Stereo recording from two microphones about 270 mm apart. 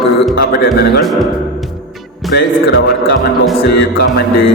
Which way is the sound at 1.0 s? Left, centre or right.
Centre.